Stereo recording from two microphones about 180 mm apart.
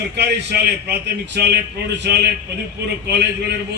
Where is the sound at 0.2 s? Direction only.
70° right (ahead or behind).